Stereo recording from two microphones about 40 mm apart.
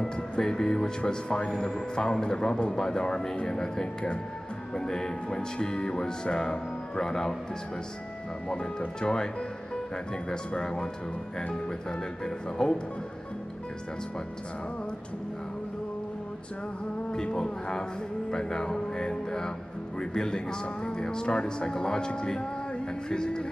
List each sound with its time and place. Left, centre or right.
0.0 s speech: centre
8.5 s speech: left
10.3 s speech: centre
12.6 s speech: centre
17.1 s speech: left